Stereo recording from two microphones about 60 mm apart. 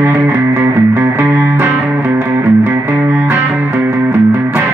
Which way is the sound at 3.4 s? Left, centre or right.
Right.